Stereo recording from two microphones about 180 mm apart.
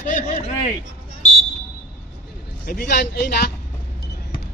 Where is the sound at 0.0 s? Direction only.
45° left (ahead or behind).